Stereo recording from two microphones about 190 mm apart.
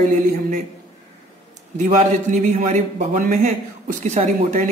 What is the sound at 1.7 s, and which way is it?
A man's voice, 40° right (ahead or behind).